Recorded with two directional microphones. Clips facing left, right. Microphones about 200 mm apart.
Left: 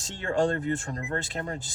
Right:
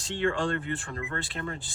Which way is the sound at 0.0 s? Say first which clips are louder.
Left 2 dB; 40° left (ahead or behind).